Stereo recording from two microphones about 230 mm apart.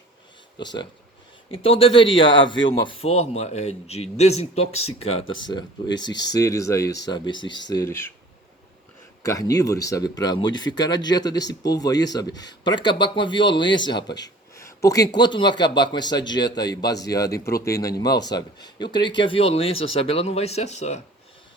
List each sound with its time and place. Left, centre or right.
0.6 s speech: centre
9.2 s speech: centre